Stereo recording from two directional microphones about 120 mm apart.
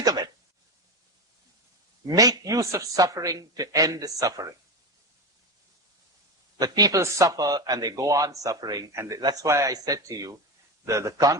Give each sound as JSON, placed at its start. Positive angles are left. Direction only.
{"t": 2.0, "sound": "a man's voice", "side_deg": -30}
{"t": 6.6, "sound": "a man's voice", "side_deg": -30}